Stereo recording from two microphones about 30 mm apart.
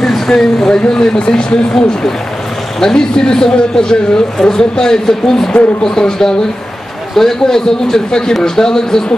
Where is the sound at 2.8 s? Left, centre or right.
Centre.